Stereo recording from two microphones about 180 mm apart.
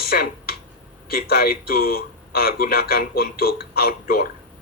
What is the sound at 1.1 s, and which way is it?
Speech, 60° left (ahead or behind).